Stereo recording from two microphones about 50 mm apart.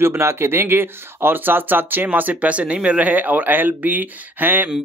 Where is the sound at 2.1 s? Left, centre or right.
Right.